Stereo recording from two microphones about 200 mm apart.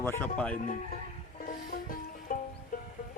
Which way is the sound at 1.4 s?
45° left (ahead or behind).